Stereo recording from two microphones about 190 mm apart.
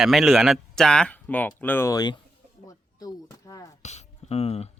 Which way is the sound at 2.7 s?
20° left (ahead or behind).